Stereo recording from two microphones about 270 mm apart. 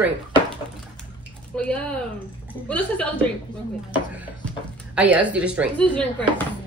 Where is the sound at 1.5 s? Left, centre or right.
Centre.